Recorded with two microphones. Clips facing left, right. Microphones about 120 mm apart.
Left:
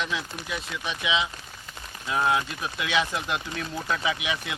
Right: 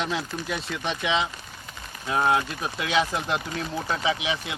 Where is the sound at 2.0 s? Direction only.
30° right (ahead or behind).